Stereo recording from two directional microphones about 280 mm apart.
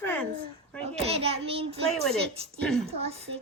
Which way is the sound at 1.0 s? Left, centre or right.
Right.